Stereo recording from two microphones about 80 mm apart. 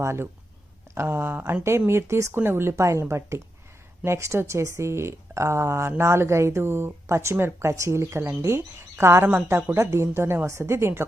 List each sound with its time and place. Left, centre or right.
0.0 s speech: right